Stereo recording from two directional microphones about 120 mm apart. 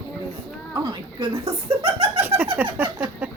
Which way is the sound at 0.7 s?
35° right (ahead or behind).